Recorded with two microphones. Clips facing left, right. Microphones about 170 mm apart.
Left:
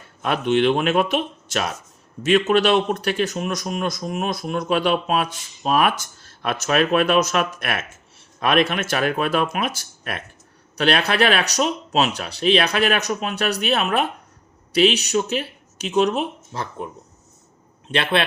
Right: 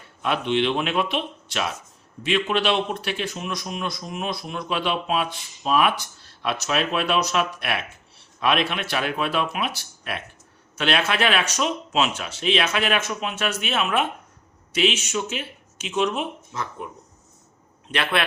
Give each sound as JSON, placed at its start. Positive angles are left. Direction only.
{"t": 0.2, "sound": "speech", "side_deg": 45}
{"t": 17.9, "sound": "a man's voice", "side_deg": 25}